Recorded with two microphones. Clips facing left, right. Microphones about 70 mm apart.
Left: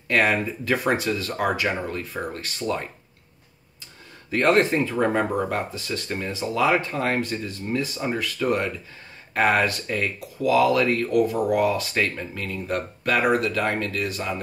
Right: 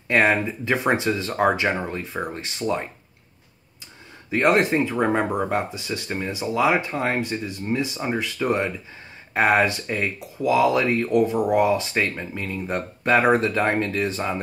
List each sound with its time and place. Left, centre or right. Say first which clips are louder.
0.1 s speech: right 2 dB; right
4.3 s speech: even; centre